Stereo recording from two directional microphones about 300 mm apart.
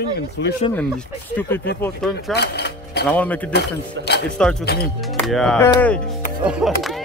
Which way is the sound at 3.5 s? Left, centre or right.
Left.